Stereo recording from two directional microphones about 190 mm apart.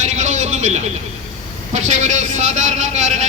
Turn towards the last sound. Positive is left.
turn(degrees=-40)  # may be behind; listen again after turning